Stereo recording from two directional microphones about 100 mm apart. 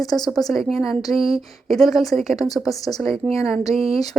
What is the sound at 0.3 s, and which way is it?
A woman's voice, centre (ahead or behind).